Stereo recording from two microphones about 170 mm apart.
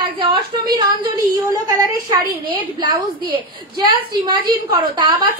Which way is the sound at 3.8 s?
25° right (ahead or behind).